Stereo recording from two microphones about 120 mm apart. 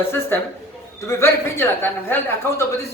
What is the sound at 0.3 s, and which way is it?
A man's voice, 20° left (ahead or behind).